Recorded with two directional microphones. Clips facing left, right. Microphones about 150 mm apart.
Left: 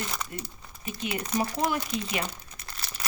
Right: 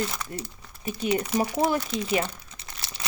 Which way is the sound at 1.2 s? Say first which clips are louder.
Right 3 dB; 10° right (ahead or behind).